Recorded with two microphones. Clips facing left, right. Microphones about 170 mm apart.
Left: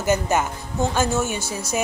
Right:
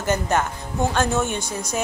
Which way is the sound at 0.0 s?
10° left (ahead or behind).